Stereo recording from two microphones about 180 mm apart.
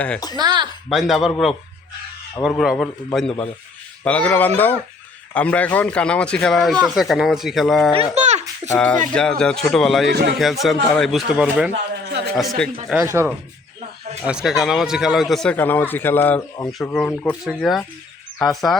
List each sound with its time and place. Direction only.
0.3 s speech: 25° right (ahead or behind)
0.9 s a man's voice: centre (ahead or behind)
2.6 s a man's voice: 5° left (ahead or behind)
8.1 s a sound: 40° right (ahead or behind)
8.7 s a man's voice: 10° left (ahead or behind)
10.1 s speech: 65° right (ahead or behind)
10.3 s a man's voice: centre (ahead or behind)
12.0 s a sound: 65° right (ahead or behind)
12.4 s a man's voice: centre (ahead or behind)
12.9 s a man's voice: 10° right (ahead or behind)